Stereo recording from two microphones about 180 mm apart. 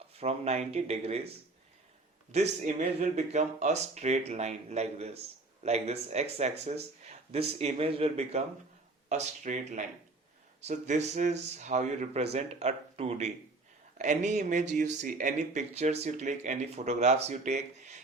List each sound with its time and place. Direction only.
0.1 s speech: 35° right (ahead or behind)
2.3 s speech: 40° right (ahead or behind)